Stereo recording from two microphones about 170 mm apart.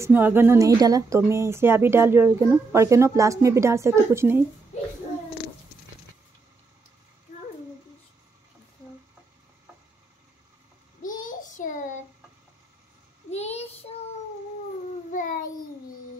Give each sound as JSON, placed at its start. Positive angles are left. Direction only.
{"t": 0.0, "sound": "a woman's voice", "side_deg": -10}
{"t": 11.0, "sound": "child singing", "side_deg": 50}
{"t": 13.3, "sound": "child singing", "side_deg": 40}